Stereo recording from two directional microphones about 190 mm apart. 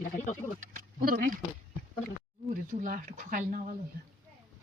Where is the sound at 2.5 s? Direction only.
45° right (ahead or behind).